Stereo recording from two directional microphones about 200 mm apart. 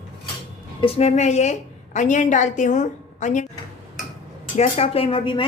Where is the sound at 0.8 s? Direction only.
30° left (ahead or behind).